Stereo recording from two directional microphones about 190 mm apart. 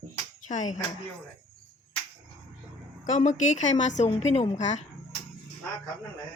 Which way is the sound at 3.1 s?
40° left (ahead or behind).